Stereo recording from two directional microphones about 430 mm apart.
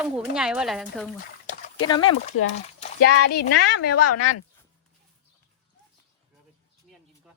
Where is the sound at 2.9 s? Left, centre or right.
Left.